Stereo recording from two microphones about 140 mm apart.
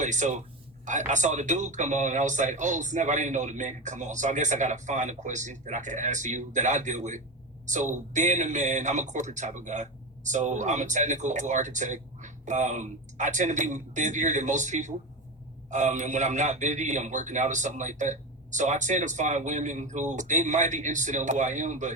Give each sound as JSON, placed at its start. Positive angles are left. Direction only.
{"t": 0.0, "sound": "a man's voice", "side_deg": -60}